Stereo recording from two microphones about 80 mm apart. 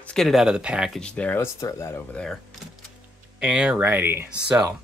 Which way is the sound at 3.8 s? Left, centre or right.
Right.